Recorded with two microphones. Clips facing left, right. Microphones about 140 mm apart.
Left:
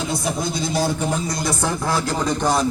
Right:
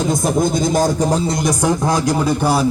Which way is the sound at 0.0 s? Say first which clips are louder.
Right 7 dB; 45° right (ahead or behind).